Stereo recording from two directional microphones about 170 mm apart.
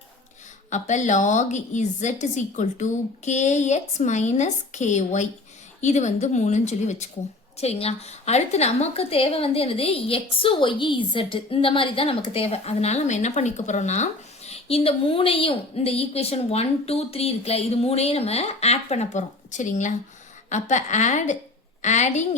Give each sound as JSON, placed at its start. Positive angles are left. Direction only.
{"t": 0.7, "sound": "a woman's voice", "side_deg": 45}